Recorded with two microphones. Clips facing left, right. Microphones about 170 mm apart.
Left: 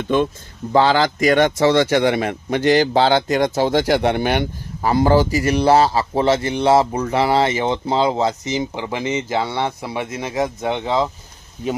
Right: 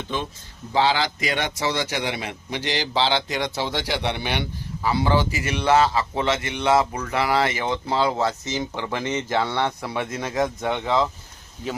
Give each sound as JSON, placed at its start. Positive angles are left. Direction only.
{"t": 0.7, "sound": "speech", "side_deg": 50}
{"t": 10.6, "sound": "speech", "side_deg": 20}